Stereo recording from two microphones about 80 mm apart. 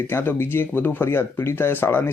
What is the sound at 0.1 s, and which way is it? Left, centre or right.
Speech, left.